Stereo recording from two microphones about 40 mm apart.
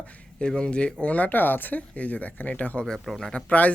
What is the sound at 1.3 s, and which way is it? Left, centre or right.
Speech, left.